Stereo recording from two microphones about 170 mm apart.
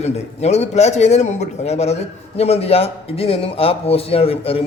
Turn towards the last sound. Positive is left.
turn(degrees=35)  # may be behind; listen again after turning